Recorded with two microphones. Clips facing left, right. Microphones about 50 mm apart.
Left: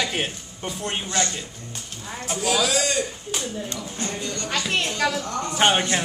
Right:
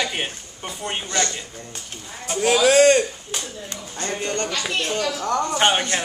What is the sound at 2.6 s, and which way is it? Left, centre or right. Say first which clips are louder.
Speech: right 10 dB; right.